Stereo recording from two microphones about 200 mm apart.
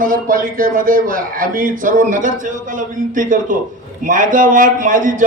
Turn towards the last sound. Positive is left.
turn(degrees=-40)  # may be behind; listen again after turning